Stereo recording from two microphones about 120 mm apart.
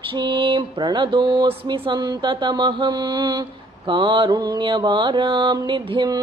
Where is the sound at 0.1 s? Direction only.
40° right (ahead or behind).